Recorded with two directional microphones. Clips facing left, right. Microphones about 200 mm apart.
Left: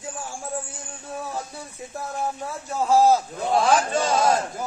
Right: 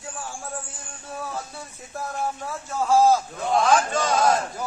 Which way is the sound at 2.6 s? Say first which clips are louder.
Left 1 dB; 15° left (ahead or behind).